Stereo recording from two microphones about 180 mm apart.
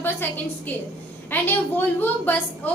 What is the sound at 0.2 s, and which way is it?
A woman's voice, 10° left (ahead or behind).